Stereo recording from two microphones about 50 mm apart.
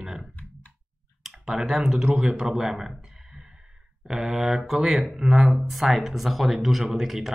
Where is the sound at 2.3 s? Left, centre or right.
Centre.